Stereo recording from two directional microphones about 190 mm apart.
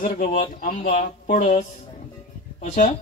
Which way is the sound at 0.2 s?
35° left (ahead or behind).